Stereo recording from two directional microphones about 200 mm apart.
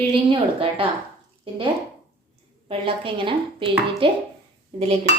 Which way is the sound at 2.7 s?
25° right (ahead or behind).